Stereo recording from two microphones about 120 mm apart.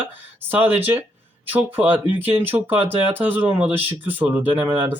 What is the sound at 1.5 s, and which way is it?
Speech, 15° right (ahead or behind).